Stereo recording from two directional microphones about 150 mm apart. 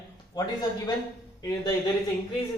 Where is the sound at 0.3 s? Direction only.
25° left (ahead or behind).